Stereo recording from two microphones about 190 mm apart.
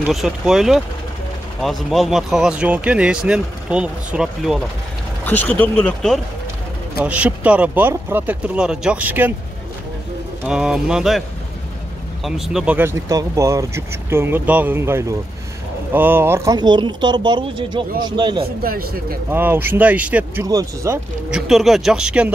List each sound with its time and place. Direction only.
0.1 s speech: centre (ahead or behind)
5.2 s a sound: 10° left (ahead or behind)
5.6 s speech: 5° left (ahead or behind)
7.0 s speech: 5° right (ahead or behind)
10.4 s speech: 5° right (ahead or behind)
12.3 s speech: 5° right (ahead or behind); by 18.5 s 25° right (ahead or behind)
18.6 s speech: 50° right (ahead or behind)
19.3 s speech: 10° right (ahead or behind)
21.5 s speech: centre (ahead or behind)